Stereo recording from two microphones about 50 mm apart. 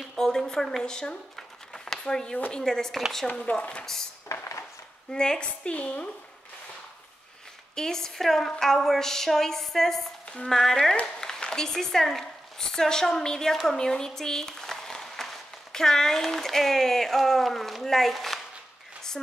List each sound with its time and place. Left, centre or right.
0.1 s a woman's voice: centre
1.3 s a sound: centre
2.5 s a woman's voice: centre
3.8 s a woman's voice: centre
4.3 s dishes: left
5.1 s a woman's voice: centre
7.7 s a woman's voice: centre